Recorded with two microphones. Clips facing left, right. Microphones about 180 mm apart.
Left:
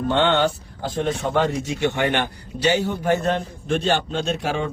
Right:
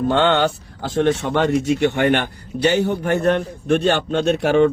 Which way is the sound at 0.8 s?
80° right.